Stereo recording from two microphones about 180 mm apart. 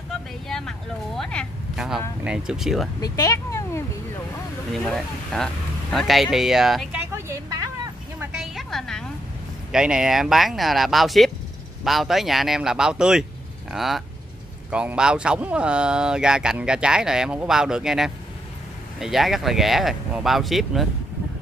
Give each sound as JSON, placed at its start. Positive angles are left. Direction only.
{"t": 0.5, "sound": "speech", "side_deg": 5}
{"t": 3.0, "sound": "speech", "side_deg": 20}
{"t": 4.8, "sound": "speech", "side_deg": 0}
{"t": 6.3, "sound": "a sound", "side_deg": 0}
{"t": 8.3, "sound": "a sound", "side_deg": 0}
{"t": 9.7, "sound": "speech", "side_deg": -5}